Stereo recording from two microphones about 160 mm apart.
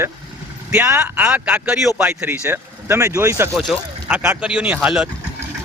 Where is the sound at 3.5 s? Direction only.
5° right (ahead or behind).